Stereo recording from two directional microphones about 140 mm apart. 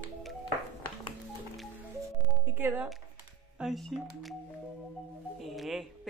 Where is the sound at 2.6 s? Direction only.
15° right (ahead or behind).